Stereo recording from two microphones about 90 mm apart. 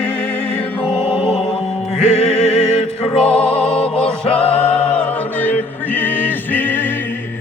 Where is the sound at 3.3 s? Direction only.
10° left (ahead or behind).